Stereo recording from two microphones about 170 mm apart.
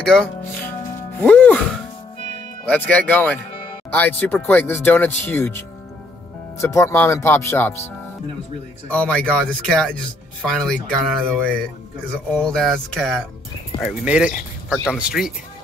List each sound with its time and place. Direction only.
0.0 s speech: 5° left (ahead or behind)
2.7 s speech: 10° left (ahead or behind)
6.6 s speech: 15° left (ahead or behind)
8.9 s speech: 5° left (ahead or behind)